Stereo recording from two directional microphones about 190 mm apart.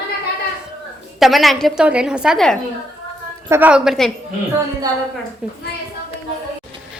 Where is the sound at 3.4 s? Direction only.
10° right (ahead or behind).